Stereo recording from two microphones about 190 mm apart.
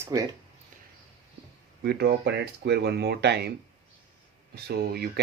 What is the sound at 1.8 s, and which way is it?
Speech, 55° right (ahead or behind).